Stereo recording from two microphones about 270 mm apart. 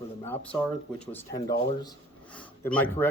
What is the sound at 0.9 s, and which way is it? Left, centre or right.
Speech, centre.